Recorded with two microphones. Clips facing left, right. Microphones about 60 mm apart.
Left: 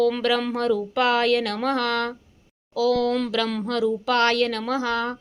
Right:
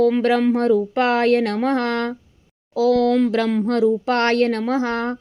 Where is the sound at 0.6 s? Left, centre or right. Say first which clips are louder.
Right 5 dB; right.